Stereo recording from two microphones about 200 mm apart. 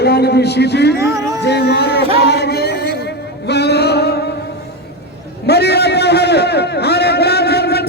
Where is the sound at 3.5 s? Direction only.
55° left (ahead or behind).